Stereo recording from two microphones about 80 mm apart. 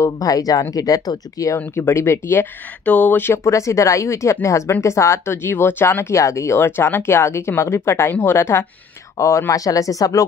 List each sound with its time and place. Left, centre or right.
0.0 s speech: left
1.8 s speech: left
2.8 s speech: left
3.4 s speech: left
5.3 s speech: left